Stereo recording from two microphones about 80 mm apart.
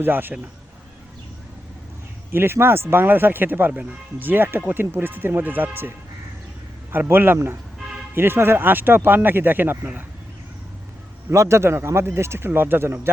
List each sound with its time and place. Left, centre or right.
0.0 s speech: right
2.3 s speech: right
6.9 s speech: right
11.3 s a man's voice: right